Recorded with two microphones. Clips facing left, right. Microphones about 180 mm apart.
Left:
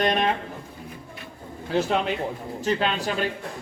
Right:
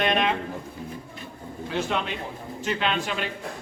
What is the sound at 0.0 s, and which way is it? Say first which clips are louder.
Speech: left 1 dB; 40° left (ahead or behind).